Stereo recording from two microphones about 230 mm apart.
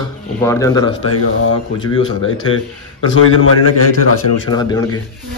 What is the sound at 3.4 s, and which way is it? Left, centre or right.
A man's voice, left.